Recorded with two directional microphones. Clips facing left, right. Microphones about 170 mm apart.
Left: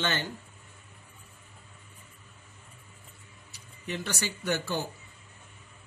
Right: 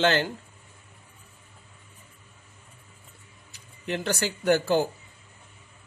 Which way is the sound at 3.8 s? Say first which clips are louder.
Right 6 dB; 55° right (ahead or behind).